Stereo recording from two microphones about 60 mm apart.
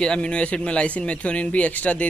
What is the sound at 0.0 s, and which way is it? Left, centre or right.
A man's voice, centre.